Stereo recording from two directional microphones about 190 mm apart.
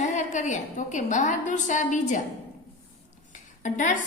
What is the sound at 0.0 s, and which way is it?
A woman's voice, 40° left (ahead or behind).